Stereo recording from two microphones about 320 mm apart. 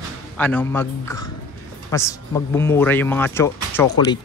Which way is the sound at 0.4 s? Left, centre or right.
Centre.